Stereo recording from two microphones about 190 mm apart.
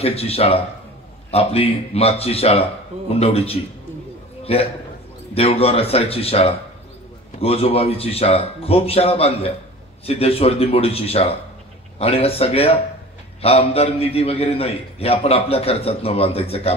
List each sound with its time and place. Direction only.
0.0 s a man's voice: 30° left (ahead or behind)
5.3 s a man's voice: 30° left (ahead or behind)